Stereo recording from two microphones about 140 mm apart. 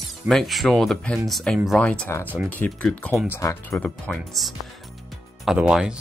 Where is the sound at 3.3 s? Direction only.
20° left (ahead or behind).